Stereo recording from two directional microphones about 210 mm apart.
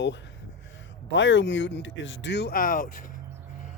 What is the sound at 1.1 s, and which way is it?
Speech, 60° left (ahead or behind).